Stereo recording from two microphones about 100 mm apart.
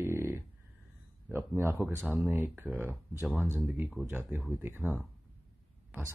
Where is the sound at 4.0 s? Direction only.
25° right (ahead or behind).